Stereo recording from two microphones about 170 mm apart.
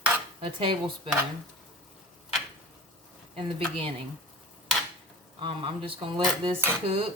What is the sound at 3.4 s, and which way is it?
Speech, 30° right (ahead or behind).